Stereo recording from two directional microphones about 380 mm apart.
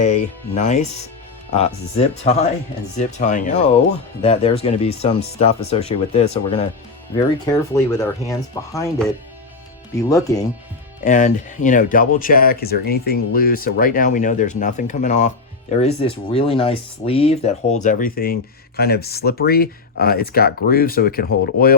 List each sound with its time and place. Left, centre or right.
0.0 s speech: centre
11.0 s speech: centre